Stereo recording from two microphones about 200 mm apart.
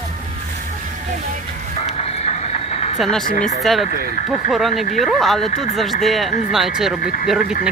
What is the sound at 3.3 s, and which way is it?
Speech, 40° left (ahead or behind).